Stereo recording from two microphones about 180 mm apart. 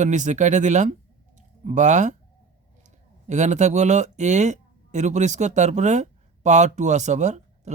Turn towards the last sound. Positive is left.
turn(degrees=-40)  # may be behind; listen again after turning